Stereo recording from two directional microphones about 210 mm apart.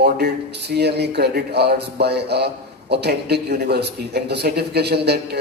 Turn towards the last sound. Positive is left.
turn(degrees=-50)  # may be behind; listen again after turning